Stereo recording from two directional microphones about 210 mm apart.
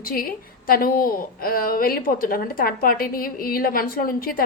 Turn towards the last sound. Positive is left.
turn(degrees=45)  # may be behind; listen again after turning